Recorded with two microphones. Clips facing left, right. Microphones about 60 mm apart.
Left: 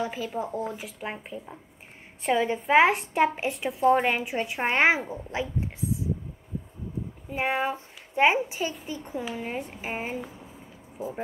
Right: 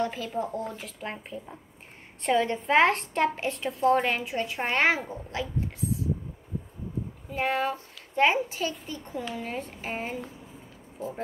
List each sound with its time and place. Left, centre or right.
0.0 s a woman's voice: centre
7.2 s a child's voice: centre